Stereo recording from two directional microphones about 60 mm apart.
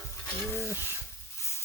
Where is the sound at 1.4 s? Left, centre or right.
Left.